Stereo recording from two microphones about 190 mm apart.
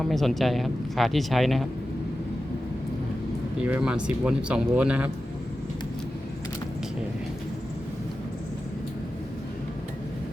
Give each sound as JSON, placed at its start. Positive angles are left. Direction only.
{"t": 0.0, "sound": "speech", "side_deg": 0}
{"t": 3.6, "sound": "speech", "side_deg": -5}